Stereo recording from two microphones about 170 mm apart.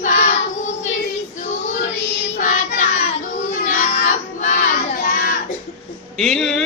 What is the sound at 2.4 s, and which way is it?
Child singing, 50° left (ahead or behind).